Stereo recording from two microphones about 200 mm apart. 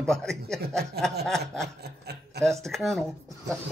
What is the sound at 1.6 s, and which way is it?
Speech, 55° right (ahead or behind).